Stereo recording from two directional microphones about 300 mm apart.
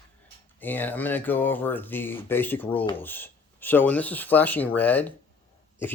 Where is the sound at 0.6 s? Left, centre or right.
Centre.